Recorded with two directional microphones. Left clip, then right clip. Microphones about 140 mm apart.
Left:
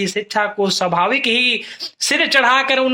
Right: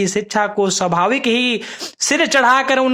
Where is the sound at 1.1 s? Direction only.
40° right (ahead or behind).